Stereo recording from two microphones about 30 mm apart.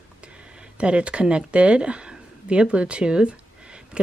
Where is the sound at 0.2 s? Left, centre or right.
Right.